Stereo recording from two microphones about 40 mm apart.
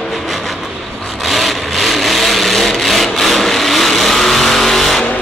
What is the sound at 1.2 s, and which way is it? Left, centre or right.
Vehicle, centre.